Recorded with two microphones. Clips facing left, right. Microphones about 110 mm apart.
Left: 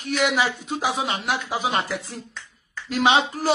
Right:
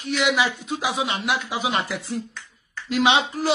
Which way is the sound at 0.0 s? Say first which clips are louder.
Even; 45° left (ahead or behind).